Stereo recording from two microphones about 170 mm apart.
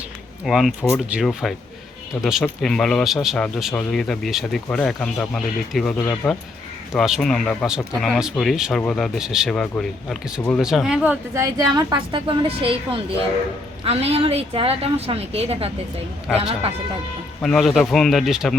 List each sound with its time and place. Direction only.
0.4 s speech: centre (ahead or behind)
11.4 s a woman's voice: 20° right (ahead or behind); by 15.7 s 35° right (ahead or behind)
17.4 s speech: centre (ahead or behind)